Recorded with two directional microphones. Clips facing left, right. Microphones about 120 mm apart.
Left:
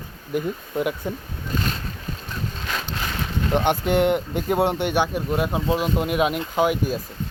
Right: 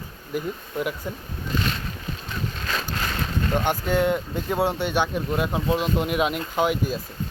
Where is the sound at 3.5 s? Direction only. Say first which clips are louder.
Left 4 dB; 25° left (ahead or behind).